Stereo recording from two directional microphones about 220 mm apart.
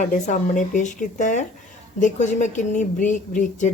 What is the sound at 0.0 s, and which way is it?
Speech, 35° left (ahead or behind).